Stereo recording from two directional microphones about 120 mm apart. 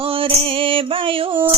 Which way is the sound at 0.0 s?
45° right (ahead or behind).